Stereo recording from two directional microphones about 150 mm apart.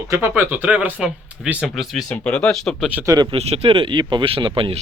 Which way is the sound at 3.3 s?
40° right (ahead or behind).